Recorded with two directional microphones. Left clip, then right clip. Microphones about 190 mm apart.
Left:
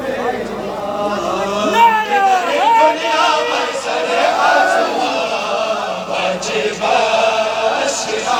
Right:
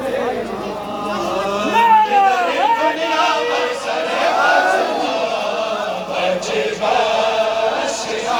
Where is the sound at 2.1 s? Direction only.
20° left (ahead or behind).